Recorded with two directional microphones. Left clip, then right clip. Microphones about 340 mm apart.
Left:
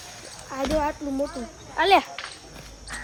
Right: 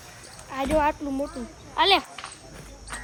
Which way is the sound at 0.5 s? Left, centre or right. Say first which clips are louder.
Right 2 dB; centre.